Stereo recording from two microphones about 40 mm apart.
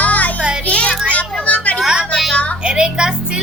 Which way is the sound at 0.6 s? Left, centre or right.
Left.